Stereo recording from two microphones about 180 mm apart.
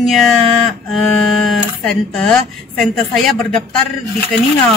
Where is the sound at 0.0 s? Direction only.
Centre (ahead or behind).